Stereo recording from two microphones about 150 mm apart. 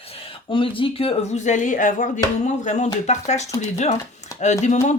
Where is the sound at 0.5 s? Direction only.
35° left (ahead or behind).